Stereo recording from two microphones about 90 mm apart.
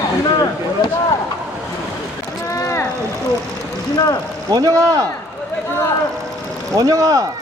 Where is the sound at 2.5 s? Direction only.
35° left (ahead or behind).